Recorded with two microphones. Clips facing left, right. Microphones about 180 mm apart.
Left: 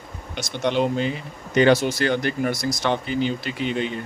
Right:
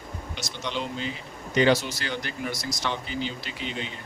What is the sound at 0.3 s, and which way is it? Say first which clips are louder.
Speech: left 11 dB; 60° left (ahead or behind).